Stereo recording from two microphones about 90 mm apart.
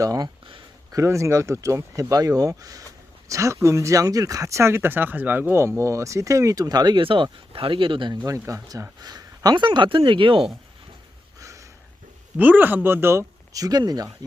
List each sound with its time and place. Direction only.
0.0 s speech: 40° right (ahead or behind)
7.0 s speech: 75° right (ahead or behind)
8.2 s speech: 35° right (ahead or behind)
9.6 s speech: 65° right (ahead or behind)
11.3 s a sound: 35° right (ahead or behind)
12.4 s speech: 20° right (ahead or behind)
13.5 s speech: 45° right (ahead or behind)